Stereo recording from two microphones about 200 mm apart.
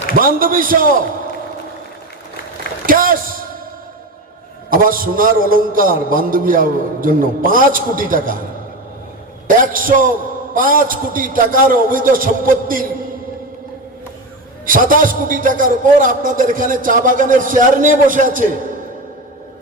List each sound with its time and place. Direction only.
0.1 s a man's voice: 45° right (ahead or behind)
2.8 s a sound: 45° right (ahead or behind)
4.7 s a man's voice: 45° right (ahead or behind)
9.7 s a man's voice: 45° right (ahead or behind)
14.7 s a man's voice: 45° right (ahead or behind)